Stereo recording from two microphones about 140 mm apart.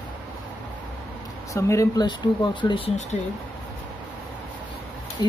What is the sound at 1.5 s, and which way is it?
Speech, 20° left (ahead or behind).